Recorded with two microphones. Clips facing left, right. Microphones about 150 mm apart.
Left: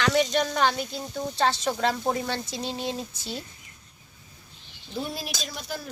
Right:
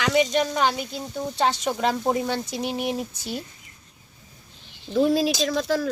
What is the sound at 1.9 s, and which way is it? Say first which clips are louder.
Speech: right 4 dB; 20° right (ahead or behind).